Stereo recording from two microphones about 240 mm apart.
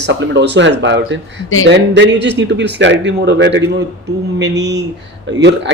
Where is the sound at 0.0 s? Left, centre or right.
Right.